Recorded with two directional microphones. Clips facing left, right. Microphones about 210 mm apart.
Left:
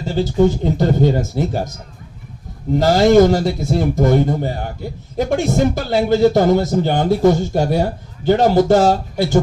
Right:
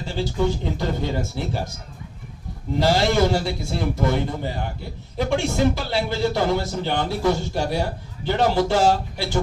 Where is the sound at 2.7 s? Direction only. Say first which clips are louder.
Left 9 dB; 45° left (ahead or behind).